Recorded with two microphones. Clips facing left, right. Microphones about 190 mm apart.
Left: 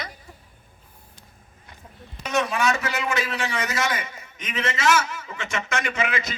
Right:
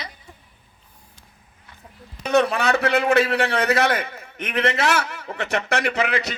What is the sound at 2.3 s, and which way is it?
A man's voice, 60° right (ahead or behind).